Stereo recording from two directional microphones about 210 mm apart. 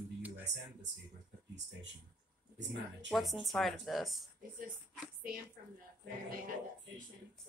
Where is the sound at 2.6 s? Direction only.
55° right (ahead or behind).